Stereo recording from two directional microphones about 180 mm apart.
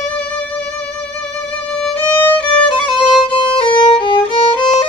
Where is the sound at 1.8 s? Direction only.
10° left (ahead or behind).